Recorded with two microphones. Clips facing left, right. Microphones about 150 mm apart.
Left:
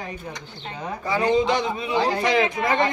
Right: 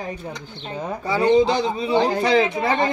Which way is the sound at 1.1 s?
30° right (ahead or behind).